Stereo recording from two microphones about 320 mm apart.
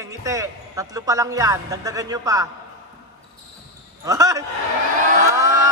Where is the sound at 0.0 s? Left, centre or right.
Centre.